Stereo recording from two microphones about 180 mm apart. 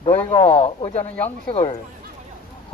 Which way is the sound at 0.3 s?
30° left (ahead or behind).